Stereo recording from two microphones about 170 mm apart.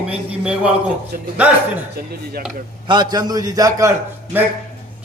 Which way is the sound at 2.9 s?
25° right (ahead or behind).